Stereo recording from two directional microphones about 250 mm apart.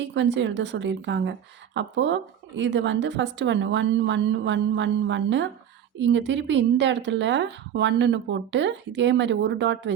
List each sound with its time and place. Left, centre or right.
0.0 s a woman's voice: right